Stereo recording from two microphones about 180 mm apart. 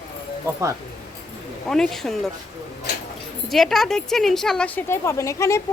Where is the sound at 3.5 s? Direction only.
Centre (ahead or behind).